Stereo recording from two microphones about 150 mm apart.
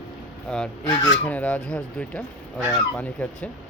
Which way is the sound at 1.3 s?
10° left (ahead or behind).